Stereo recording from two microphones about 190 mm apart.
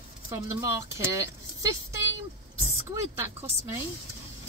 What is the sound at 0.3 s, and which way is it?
Speech, 15° right (ahead or behind).